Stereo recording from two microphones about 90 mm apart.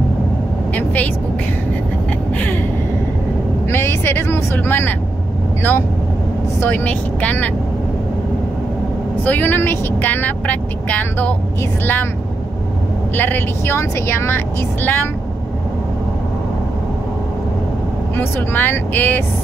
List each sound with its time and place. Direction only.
0.7 s speech: 20° left (ahead or behind)
2.3 s vehicle: 20° left (ahead or behind)
3.7 s vehicle: 25° left (ahead or behind)
5.6 s speech: 25° left (ahead or behind)
9.2 s speech: 20° left (ahead or behind)
13.1 s speech: 20° left (ahead or behind)
18.1 s speech: 25° left (ahead or behind)